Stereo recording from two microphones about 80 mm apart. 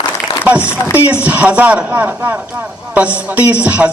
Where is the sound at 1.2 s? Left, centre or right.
Centre.